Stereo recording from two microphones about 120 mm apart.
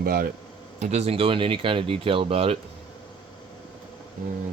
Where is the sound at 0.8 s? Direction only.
70° right (ahead or behind).